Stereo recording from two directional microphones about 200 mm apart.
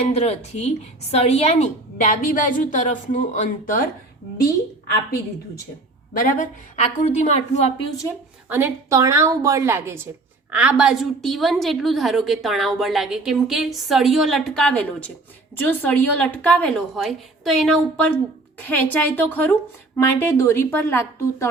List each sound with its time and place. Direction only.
0.0 s speech: 30° left (ahead or behind)
6.1 s speech: 40° left (ahead or behind)
8.4 s a woman's voice: 10° right (ahead or behind); by 21.4 s 15° left (ahead or behind)